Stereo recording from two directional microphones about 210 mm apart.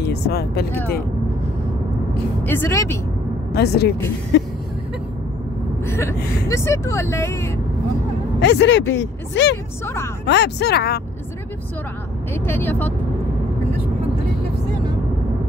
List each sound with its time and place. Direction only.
0.0 s speech: 50° left (ahead or behind)
2.4 s speech: 10° left (ahead or behind)
3.5 s speech: 50° left (ahead or behind)
5.9 s a sound: 10° left (ahead or behind)
6.5 s speech: 15° left (ahead or behind)
8.4 s speech: 55° left (ahead or behind)
12.4 s speech: 10° left (ahead or behind)